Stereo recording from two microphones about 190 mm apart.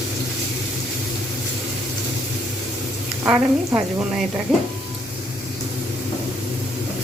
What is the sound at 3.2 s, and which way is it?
Speech, 15° right (ahead or behind).